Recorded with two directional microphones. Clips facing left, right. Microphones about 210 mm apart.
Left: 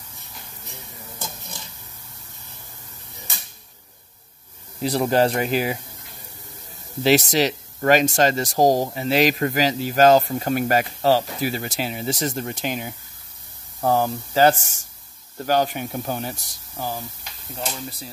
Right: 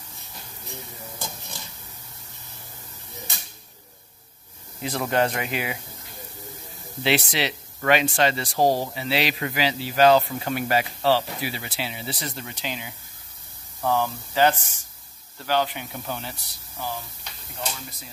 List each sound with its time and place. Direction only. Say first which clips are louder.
4.8 s speech: left 5 dB; 35° left (ahead or behind)
7.0 s speech: left 6 dB; 40° left (ahead or behind)